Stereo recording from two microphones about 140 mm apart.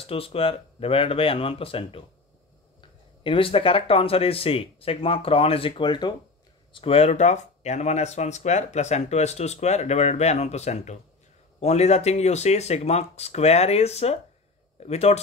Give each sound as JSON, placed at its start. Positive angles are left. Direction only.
{"t": 0.0, "sound": "speech", "side_deg": 40}
{"t": 6.7, "sound": "speech", "side_deg": 45}